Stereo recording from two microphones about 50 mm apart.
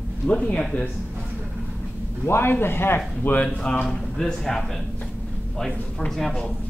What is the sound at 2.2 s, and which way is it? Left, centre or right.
A man's voice, left.